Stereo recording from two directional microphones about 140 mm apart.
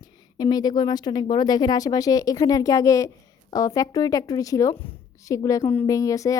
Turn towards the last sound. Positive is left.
turn(degrees=25)  # may be behind; listen again after turning